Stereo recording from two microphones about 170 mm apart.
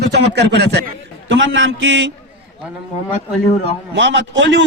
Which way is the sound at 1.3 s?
90° right.